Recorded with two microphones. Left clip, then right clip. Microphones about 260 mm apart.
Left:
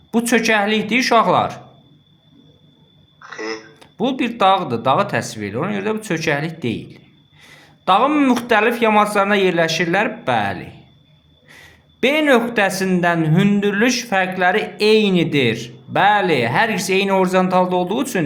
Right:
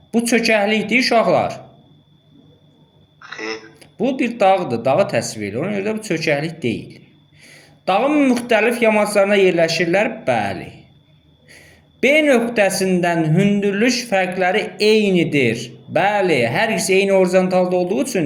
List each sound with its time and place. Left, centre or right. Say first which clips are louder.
0.1 s speech: even; centre
3.3 s a sound: even; centre
3.8 s speech: right 1 dB; centre